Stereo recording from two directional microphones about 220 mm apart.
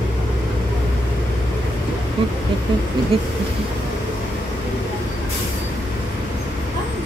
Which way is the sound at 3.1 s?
25° right (ahead or behind).